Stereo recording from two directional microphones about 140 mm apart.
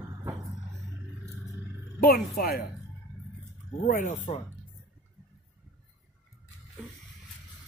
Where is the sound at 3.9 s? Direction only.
70° left (ahead or behind).